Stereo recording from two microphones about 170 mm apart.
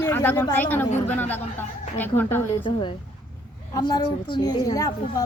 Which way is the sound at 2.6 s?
30° left (ahead or behind).